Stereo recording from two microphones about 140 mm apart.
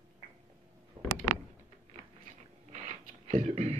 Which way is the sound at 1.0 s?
40° right (ahead or behind).